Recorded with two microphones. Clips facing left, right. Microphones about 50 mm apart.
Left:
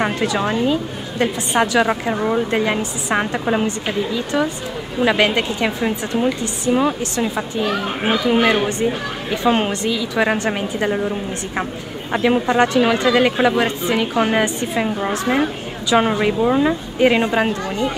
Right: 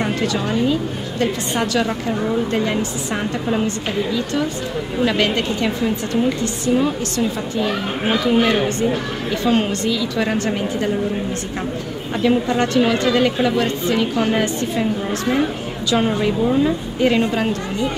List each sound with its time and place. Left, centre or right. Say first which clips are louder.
0.0 s a woman's voice: left 2 dB; left
3.6 s a woman's voice: even; centre
12.1 s a woman's voice: left 1 dB; left
12.6 s a woman's voice: left 1 dB; centre
16.2 s a woman's voice: left 1 dB; left